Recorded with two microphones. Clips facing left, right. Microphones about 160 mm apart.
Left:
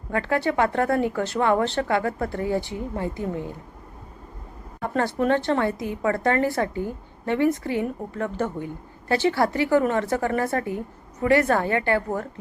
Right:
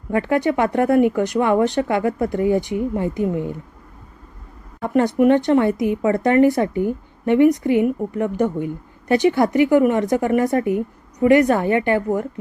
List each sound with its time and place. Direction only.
0.1 s a woman's voice: 20° right (ahead or behind)
4.9 s a woman's voice: 15° right (ahead or behind)